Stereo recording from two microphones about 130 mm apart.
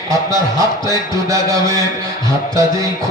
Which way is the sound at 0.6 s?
25° right (ahead or behind).